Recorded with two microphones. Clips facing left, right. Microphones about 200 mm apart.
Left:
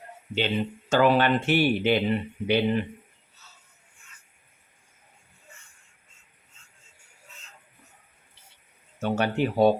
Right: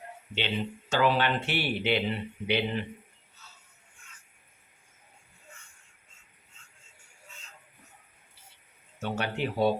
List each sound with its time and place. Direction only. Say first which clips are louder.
0.3 s speech: left 5 dB; 45° left (ahead or behind)
9.0 s speech: left 6 dB; 45° left (ahead or behind)